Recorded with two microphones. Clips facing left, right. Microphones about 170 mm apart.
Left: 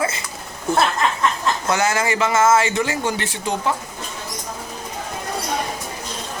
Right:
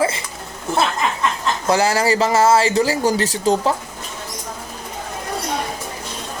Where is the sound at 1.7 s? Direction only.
30° right (ahead or behind).